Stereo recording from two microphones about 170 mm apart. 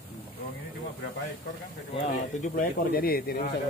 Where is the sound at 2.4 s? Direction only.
55° left (ahead or behind).